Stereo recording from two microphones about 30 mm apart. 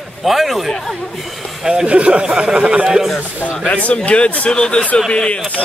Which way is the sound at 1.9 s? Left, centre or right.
Right.